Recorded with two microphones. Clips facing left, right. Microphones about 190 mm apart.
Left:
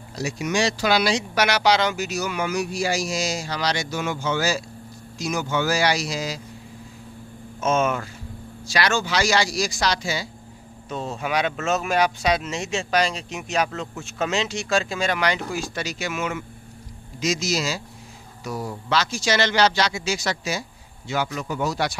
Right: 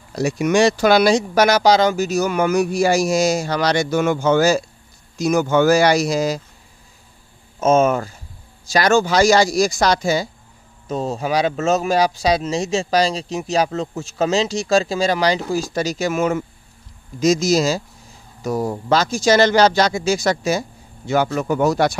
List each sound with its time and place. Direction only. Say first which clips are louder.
0.1 s speech: right 8 dB; 55° right (ahead or behind)
7.6 s speech: right 7 dB; 45° right (ahead or behind)